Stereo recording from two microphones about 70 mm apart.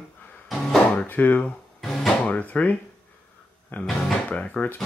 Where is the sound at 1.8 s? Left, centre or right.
Centre.